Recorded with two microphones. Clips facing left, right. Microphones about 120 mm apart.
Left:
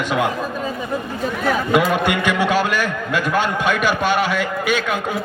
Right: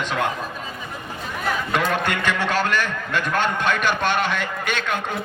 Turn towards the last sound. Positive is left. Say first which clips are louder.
# left 5 dB
turn(degrees=5)  # may be behind; listen again after turning